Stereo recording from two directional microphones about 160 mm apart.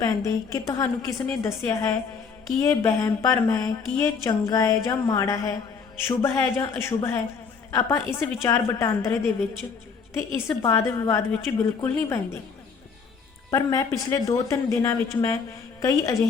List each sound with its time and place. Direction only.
0.0 s a woman's voice: 20° left (ahead or behind)
13.5 s speech: 20° left (ahead or behind)